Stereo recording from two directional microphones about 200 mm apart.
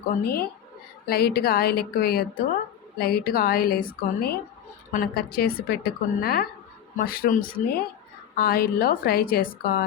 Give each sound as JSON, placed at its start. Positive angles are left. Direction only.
{"t": 0.1, "sound": "a woman's voice", "side_deg": 50}